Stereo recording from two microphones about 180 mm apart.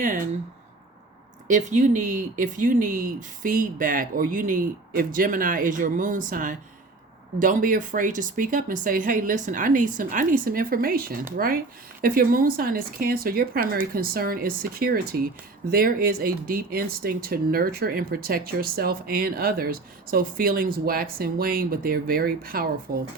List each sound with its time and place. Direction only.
0.0 s speech: 50° right (ahead or behind)
1.5 s speech: 45° right (ahead or behind)